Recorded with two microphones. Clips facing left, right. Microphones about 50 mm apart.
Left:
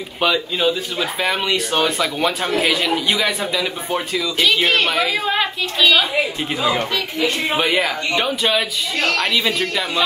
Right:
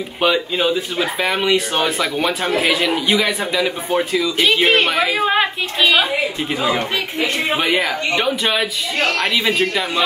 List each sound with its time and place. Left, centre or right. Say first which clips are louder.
0.2 s speech: right 1 dB; centre
2.4 s a man's voice: right 3 dB; right
7.5 s speech: right 1 dB; centre
7.8 s a man's voice: right 1 dB; right
8.4 s speech: even; centre
9.4 s a man's voice: right 2 dB; right